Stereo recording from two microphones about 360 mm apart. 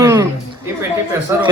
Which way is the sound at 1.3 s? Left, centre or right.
Centre.